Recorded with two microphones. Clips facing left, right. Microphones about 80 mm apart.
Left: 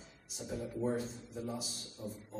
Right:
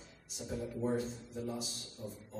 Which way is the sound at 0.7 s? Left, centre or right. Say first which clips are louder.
Even; centre.